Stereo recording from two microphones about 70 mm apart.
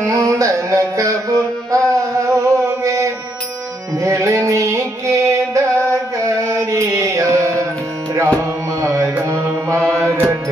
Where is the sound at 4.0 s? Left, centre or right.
Right.